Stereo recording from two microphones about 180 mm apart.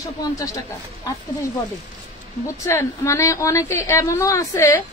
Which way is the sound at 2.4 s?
15° left (ahead or behind).